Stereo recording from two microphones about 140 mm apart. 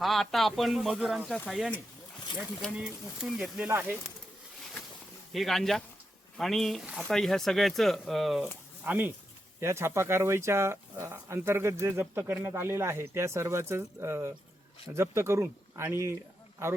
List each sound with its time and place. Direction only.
0.0 s speech: centre (ahead or behind)
5.3 s speech: centre (ahead or behind)
8.8 s speech: 15° right (ahead or behind)